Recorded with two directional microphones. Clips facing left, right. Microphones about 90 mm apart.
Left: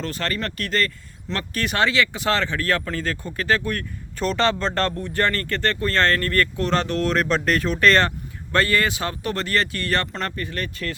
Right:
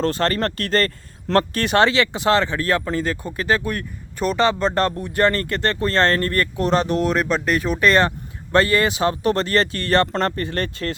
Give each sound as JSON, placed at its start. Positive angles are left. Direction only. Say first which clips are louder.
{"t": 0.0, "sound": "speech", "louder": "right 7 dB", "side_deg": -35}
{"t": 1.5, "sound": "speech", "louder": "even", "side_deg": -30}